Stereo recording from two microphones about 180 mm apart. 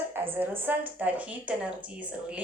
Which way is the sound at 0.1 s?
10° right (ahead or behind).